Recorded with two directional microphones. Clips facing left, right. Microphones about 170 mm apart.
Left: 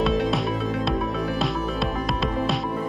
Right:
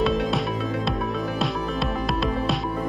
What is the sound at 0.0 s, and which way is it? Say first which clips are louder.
Music: even; centre (ahead or behind).